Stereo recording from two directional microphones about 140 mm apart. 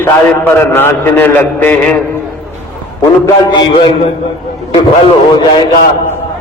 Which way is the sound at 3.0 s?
25° left (ahead or behind).